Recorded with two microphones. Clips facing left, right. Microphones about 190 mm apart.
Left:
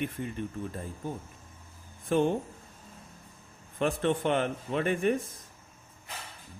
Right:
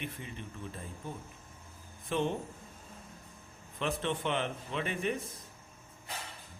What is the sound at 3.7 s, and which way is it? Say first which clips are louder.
Speech: left 6 dB; 50° left (ahead or behind).